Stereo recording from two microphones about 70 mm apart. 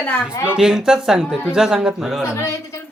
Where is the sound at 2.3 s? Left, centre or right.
Left.